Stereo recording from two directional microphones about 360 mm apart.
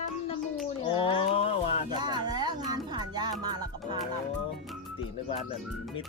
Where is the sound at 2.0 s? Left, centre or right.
Centre.